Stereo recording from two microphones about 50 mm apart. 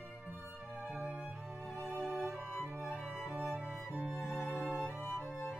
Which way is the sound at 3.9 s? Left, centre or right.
Centre.